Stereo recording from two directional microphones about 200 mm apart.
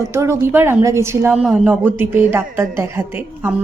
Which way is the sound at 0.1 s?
15° right (ahead or behind).